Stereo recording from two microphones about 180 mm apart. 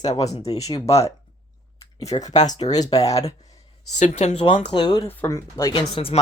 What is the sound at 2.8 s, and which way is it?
Speech, 20° left (ahead or behind).